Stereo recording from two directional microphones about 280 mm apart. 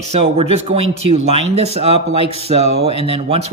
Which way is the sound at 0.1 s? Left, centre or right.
Right.